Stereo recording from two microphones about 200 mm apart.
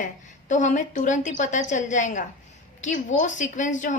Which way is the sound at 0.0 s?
35° left (ahead or behind).